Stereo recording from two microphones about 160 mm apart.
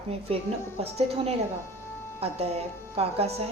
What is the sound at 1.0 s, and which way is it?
A woman's voice, 40° right (ahead or behind).